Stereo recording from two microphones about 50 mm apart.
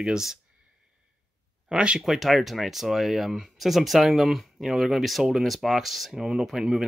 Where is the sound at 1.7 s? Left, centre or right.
Centre.